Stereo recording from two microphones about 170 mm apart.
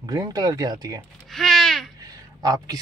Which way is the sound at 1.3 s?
Centre (ahead or behind).